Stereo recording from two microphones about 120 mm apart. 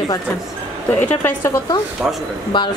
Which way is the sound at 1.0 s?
15° left (ahead or behind).